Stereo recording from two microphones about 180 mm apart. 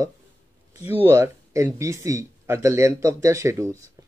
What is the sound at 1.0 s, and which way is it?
Speech, 15° right (ahead or behind).